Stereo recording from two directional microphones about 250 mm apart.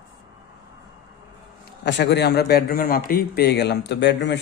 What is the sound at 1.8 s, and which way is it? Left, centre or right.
A man's voice, left.